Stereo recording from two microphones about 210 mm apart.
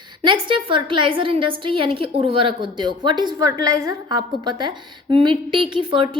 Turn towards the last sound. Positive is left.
turn(degrees=-25)  # may be behind; listen again after turning